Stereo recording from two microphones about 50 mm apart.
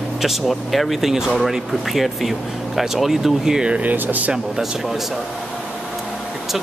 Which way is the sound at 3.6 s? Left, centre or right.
Right.